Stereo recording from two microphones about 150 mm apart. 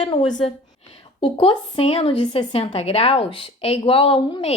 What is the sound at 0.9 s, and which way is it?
Speech, 40° left (ahead or behind).